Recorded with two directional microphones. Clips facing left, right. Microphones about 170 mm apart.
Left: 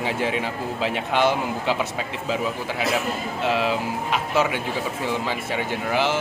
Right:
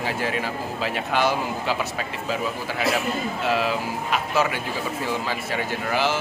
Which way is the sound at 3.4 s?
20° left (ahead or behind).